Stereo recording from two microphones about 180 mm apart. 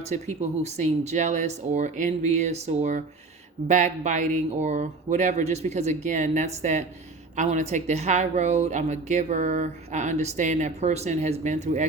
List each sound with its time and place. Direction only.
0.6 s a woman's voice: 40° right (ahead or behind)